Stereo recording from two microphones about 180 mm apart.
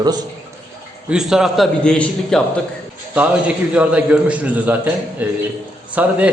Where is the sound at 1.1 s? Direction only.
5° right (ahead or behind).